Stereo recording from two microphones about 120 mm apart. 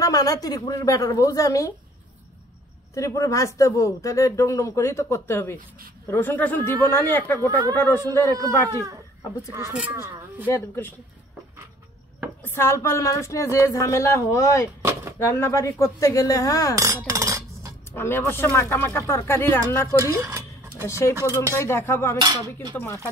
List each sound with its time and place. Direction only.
0.0 s speech: 30° left (ahead or behind)
2.9 s speech: 25° left (ahead or behind)
8.4 s speech: 25° right (ahead or behind)
12.4 s speech: 20° left (ahead or behind)
14.8 s a sound: 25° right (ahead or behind)
15.1 s speech: 20° left (ahead or behind)
16.7 s a sound: 25° right (ahead or behind)
17.9 s speech: 20° left (ahead or behind)
20.1 s speech: 25° right (ahead or behind)
20.8 s speech: 25° left (ahead or behind)
21.1 s speech: 20° right (ahead or behind)
21.5 s speech: 20° left (ahead or behind)
22.2 s speech: 35° right (ahead or behind)